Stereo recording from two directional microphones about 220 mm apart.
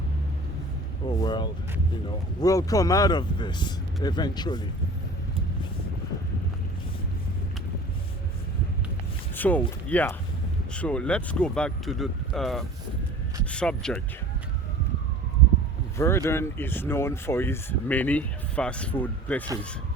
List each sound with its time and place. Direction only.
1.0 s a sound: 20° left (ahead or behind)
2.0 s speech: 15° left (ahead or behind)
9.3 s speech: 5° left (ahead or behind)
16.0 s speech: 10° left (ahead or behind)